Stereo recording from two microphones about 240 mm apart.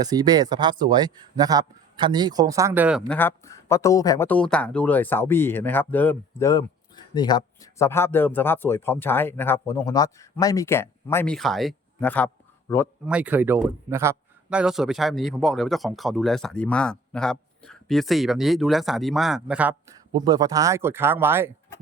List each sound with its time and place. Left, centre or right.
0.0 s speech: centre
3.1 s speech: centre
13.1 s a man's voice: centre
20.1 s speech: centre